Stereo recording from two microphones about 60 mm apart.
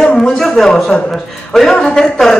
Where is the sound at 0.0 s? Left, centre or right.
Centre.